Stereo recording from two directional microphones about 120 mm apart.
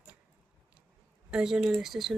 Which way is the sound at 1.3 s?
5° right (ahead or behind).